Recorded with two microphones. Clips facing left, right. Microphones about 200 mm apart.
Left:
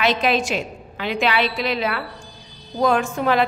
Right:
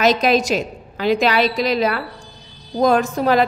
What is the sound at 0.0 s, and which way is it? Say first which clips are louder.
A woman's voice: right 4 dB; 40° right (ahead or behind).